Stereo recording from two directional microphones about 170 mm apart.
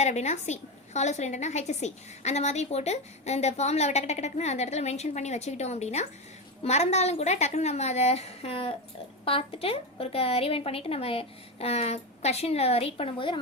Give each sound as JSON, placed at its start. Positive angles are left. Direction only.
{"t": 0.0, "sound": "a woman's voice", "side_deg": 40}